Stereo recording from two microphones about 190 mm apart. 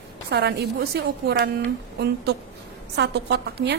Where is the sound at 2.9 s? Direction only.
60° right (ahead or behind).